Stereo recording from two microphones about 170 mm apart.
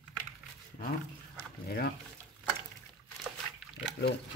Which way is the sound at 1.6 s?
70° left (ahead or behind).